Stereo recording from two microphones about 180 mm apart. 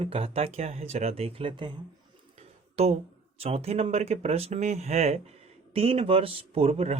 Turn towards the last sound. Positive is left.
turn(degrees=-35)  # may be behind; listen again after turning